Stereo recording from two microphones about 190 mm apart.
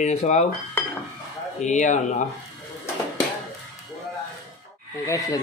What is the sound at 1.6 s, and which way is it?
Speech, 40° left (ahead or behind).